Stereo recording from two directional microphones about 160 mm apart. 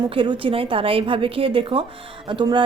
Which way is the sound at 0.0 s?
30° right (ahead or behind).